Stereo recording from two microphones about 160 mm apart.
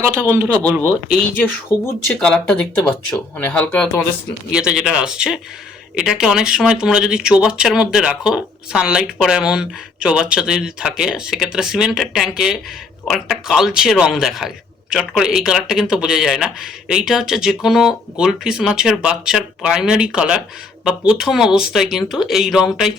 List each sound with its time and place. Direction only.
0.0 s speech: 15° right (ahead or behind)
1.4 s speech: 15° left (ahead or behind)
4.5 s speech: 5° right (ahead or behind)